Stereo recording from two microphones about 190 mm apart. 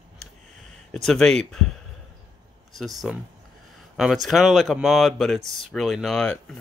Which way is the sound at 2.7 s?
Centre (ahead or behind).